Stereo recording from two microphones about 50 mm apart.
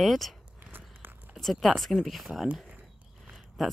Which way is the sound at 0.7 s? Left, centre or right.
Right.